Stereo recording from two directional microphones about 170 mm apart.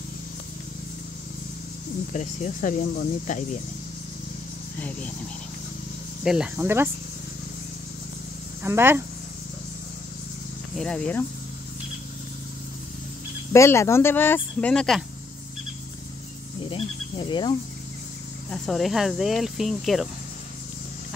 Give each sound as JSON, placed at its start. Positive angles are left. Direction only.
{"t": 2.1, "sound": "speech", "side_deg": 45}
{"t": 4.7, "sound": "speech", "side_deg": 10}
{"t": 6.2, "sound": "speech", "side_deg": -5}
{"t": 8.6, "sound": "speech", "side_deg": -15}
{"t": 10.8, "sound": "speech", "side_deg": 5}
{"t": 13.5, "sound": "speech", "side_deg": 15}
{"t": 16.6, "sound": "speech", "side_deg": 30}
{"t": 18.5, "sound": "speech", "side_deg": 0}